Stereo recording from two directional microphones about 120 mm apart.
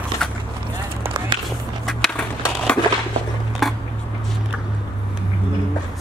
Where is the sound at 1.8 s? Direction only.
Centre (ahead or behind).